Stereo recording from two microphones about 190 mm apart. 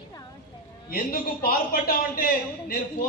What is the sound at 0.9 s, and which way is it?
A man's voice, 50° left (ahead or behind).